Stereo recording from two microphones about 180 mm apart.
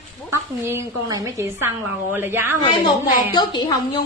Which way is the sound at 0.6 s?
15° right (ahead or behind).